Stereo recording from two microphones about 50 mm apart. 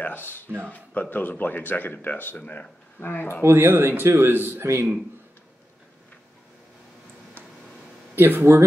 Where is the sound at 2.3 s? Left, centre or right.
Left.